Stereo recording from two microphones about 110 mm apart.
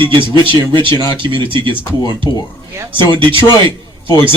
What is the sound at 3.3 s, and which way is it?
A man's voice, 50° right (ahead or behind).